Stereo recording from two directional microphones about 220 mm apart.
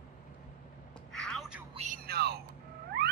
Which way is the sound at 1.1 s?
Centre (ahead or behind).